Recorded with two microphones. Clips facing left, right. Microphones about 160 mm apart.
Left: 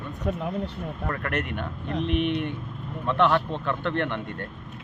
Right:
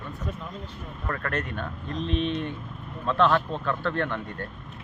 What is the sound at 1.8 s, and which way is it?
Speech, 65° left (ahead or behind).